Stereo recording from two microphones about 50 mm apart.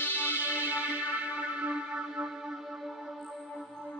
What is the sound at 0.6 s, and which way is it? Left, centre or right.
Music, right.